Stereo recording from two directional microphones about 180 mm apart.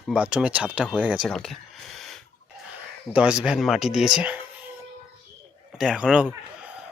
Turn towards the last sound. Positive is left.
turn(degrees=-5)  # may be behind; listen again after turning